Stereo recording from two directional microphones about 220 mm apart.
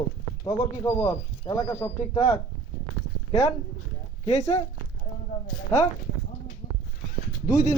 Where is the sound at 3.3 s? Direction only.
30° left (ahead or behind).